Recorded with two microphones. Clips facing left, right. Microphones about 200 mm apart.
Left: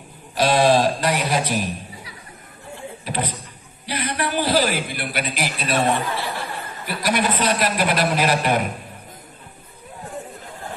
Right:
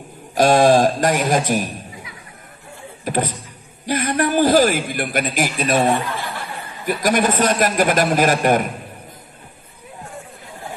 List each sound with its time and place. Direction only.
0.3 s a man's voice: 45° right (ahead or behind)
3.1 s a sound: 45° right (ahead or behind)
3.8 s a man's voice: 45° right (ahead or behind)